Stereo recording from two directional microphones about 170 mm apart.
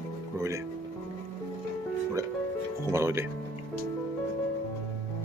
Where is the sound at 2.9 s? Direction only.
15° right (ahead or behind).